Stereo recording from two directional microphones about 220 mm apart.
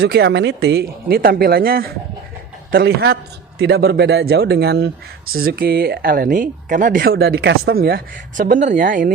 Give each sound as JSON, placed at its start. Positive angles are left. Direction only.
{"t": 0.0, "sound": "speech", "side_deg": -50}